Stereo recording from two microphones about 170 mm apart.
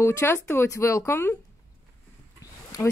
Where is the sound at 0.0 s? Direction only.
15° left (ahead or behind).